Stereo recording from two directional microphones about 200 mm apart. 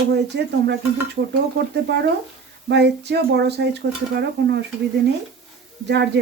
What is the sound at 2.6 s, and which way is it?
Speech, 55° right (ahead or behind).